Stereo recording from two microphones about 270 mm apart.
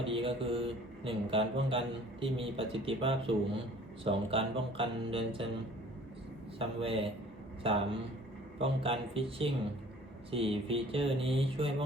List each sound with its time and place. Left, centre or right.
0.0 s speech: centre
6.6 s speech: right